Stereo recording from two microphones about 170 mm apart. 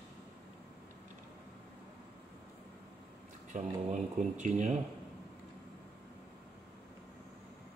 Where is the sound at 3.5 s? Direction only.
45° right (ahead or behind).